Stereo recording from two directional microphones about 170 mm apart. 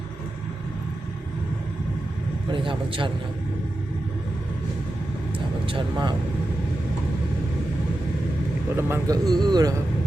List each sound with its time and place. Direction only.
2.5 s speech: 30° right (ahead or behind)
5.6 s speech: 30° right (ahead or behind)
8.7 s speech: 20° right (ahead or behind)